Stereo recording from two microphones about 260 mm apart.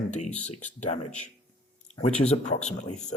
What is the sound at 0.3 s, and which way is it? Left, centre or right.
Speech, centre.